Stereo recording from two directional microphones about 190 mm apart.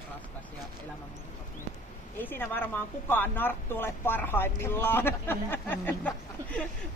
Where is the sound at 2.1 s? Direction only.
10° left (ahead or behind).